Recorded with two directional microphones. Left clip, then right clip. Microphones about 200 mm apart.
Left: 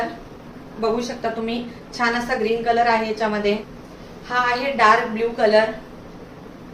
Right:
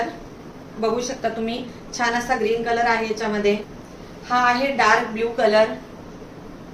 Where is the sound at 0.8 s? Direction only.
15° right (ahead or behind).